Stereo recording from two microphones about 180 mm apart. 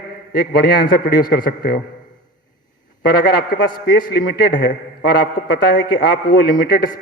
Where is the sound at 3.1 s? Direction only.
55° left (ahead or behind).